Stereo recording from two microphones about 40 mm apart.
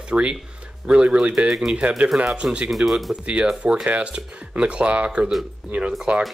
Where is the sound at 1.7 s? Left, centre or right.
Right.